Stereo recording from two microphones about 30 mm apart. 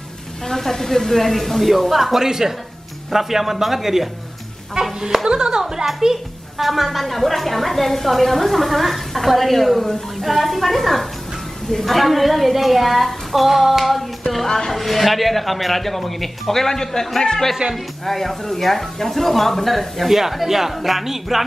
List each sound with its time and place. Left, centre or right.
0.5 s speech: centre
2.0 s speech: centre
2.2 s speech: centre
5.3 s speech: right
6.6 s a woman's voice: centre
20.1 s speech: centre